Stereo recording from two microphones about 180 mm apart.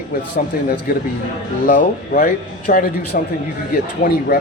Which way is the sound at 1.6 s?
50° left (ahead or behind).